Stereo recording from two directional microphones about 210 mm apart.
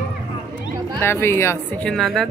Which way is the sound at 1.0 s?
10° left (ahead or behind).